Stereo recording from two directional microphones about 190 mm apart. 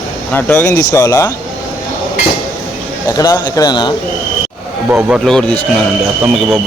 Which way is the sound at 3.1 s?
20° left (ahead or behind).